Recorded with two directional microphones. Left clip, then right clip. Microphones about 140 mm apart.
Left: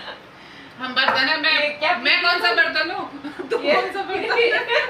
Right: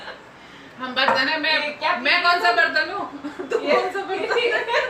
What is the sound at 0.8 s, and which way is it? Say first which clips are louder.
Speech: left 1 dB; 20° right (ahead or behind).